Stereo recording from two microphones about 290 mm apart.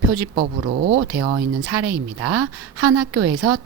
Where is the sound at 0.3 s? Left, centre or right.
Right.